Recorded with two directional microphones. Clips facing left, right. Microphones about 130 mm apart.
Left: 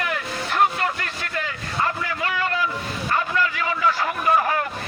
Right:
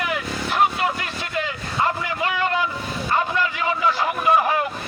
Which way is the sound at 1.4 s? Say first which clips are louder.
Right 2 dB; 20° right (ahead or behind).